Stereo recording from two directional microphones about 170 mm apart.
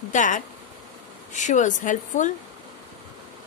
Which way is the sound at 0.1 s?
50° left (ahead or behind).